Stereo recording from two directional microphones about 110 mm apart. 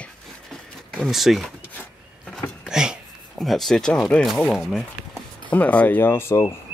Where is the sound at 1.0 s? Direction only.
Centre (ahead or behind).